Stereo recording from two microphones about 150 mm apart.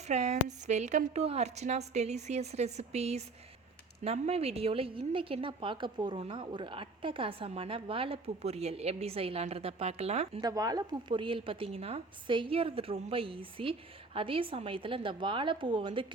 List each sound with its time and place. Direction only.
0.1 s a woman's voice: 50° right (ahead or behind)
10.4 s a woman's voice: 25° right (ahead or behind)